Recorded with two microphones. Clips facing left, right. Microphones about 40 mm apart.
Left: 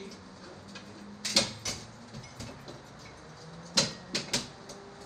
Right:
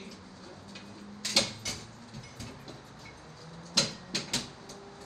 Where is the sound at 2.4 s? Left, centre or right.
Right.